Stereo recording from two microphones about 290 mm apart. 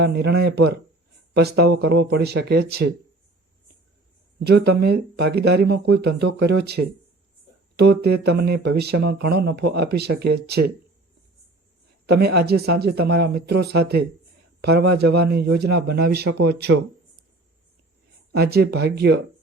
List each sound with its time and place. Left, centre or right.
0.0 s speech: right
4.4 s speech: right
12.0 s speech: right
18.3 s speech: right